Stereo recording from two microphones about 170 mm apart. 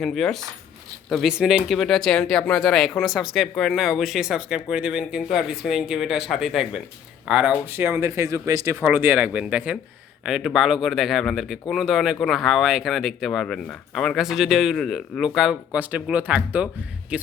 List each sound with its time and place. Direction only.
0.0 s speech: centre (ahead or behind)